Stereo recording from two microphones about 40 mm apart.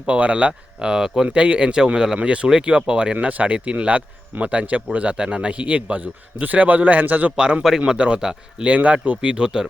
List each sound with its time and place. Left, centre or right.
0.0 s speech: right
0.8 s a man's voice: centre
2.1 s a man's voice: right
3.2 s speech: right
5.1 s a man's voice: right
7.3 s a man's voice: right
8.6 s speech: right